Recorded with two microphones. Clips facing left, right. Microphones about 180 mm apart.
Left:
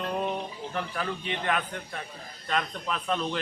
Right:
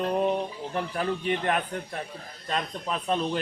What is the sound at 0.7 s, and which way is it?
A man's voice, 35° right (ahead or behind).